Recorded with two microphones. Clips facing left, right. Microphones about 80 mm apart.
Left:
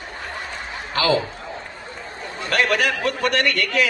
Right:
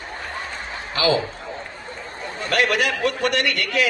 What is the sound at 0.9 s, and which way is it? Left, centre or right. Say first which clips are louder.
Speech: even; left.